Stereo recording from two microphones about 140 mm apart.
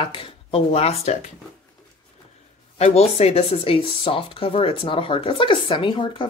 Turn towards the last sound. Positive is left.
turn(degrees=35)  # may be behind; listen again after turning